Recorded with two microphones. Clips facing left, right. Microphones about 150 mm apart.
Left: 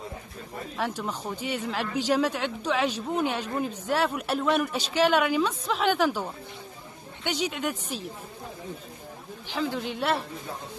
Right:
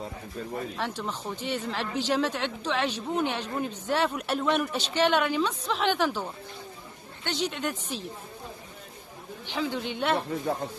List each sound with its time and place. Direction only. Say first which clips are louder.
0.7 s speech: left 2 dB; 10° left (ahead or behind)
9.5 s a man's voice: left 1 dB; centre (ahead or behind)
10.4 s speech: right 8 dB; 65° right (ahead or behind)